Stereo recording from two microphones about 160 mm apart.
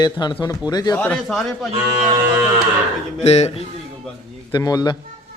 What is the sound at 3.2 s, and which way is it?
Speech, 45° left (ahead or behind).